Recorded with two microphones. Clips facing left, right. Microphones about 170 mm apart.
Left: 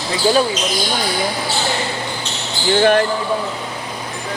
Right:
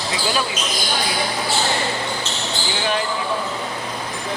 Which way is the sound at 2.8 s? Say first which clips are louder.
Left 10 dB; 55° left (ahead or behind).